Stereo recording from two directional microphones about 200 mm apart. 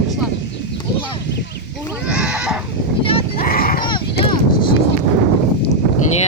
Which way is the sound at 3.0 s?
30° left (ahead or behind).